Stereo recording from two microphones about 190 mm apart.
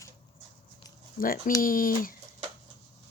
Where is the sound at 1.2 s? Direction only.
50° left (ahead or behind).